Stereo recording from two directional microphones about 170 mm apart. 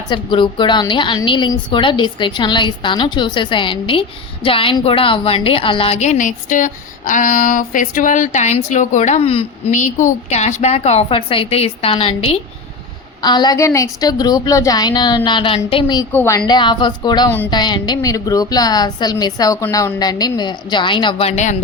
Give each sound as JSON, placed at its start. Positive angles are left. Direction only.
{"t": 0.1, "sound": "a woman's voice", "side_deg": 30}
{"t": 16.1, "sound": "a woman's voice", "side_deg": 15}
{"t": 16.5, "sound": "a woman's voice", "side_deg": 25}